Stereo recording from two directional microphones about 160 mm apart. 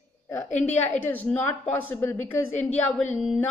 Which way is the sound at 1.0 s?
10° left (ahead or behind).